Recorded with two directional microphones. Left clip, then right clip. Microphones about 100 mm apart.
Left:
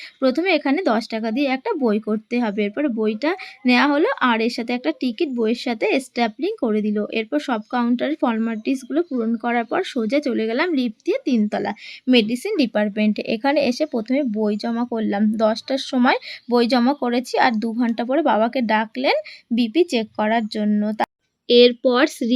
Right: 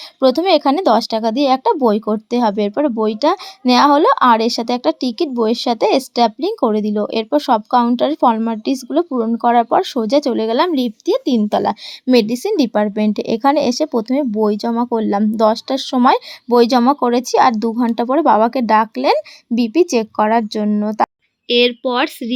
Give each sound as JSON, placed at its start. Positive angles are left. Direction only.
{"t": 0.2, "sound": "speech", "side_deg": -45}
{"t": 12.0, "sound": "a woman's voice", "side_deg": -30}
{"t": 21.4, "sound": "speech", "side_deg": 0}